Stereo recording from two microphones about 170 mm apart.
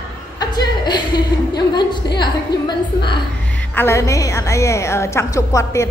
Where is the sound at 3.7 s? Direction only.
15° left (ahead or behind).